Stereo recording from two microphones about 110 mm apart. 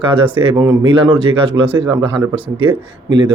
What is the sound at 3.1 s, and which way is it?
Speech, 40° right (ahead or behind).